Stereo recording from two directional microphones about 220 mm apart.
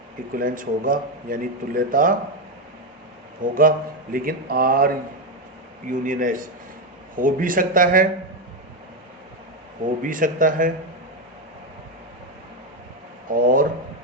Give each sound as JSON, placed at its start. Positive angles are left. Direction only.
{"t": 0.3, "sound": "speech", "side_deg": -40}
{"t": 3.4, "sound": "speech", "side_deg": -40}
{"t": 5.9, "sound": "speech", "side_deg": -35}
{"t": 10.0, "sound": "speech", "side_deg": -40}
{"t": 13.3, "sound": "speech", "side_deg": -40}